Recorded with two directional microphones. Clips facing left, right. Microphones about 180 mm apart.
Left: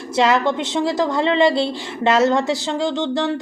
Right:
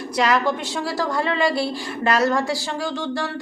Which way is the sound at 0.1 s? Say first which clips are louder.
Left 3 dB; 25° left (ahead or behind).